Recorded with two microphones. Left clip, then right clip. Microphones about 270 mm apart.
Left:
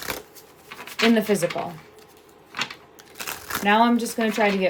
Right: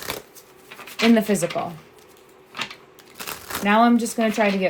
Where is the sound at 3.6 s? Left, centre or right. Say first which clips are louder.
Right 1 dB; right.